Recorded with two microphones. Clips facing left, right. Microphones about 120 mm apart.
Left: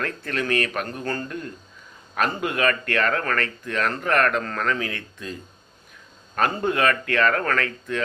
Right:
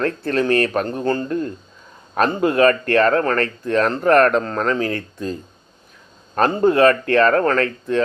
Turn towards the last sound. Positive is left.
turn(degrees=-35)  # may be behind; listen again after turning